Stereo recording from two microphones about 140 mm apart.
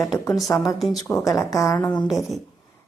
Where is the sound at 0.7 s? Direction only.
Centre (ahead or behind).